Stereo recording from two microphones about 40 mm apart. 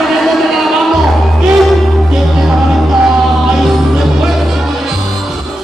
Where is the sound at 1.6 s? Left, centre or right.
Centre.